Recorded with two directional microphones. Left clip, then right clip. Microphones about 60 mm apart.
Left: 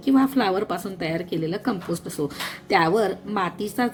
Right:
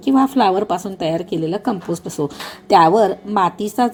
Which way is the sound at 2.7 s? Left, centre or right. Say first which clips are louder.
Right 9 dB; right.